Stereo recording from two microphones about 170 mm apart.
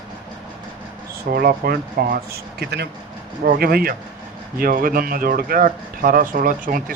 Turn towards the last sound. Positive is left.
turn(degrees=-55)  # may be behind; listen again after turning